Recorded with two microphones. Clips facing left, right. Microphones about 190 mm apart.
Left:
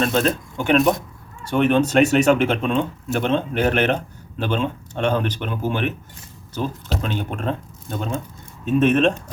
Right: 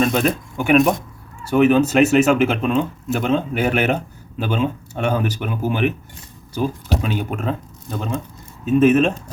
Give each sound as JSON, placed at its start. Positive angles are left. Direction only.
{"t": 0.0, "sound": "speech", "side_deg": -10}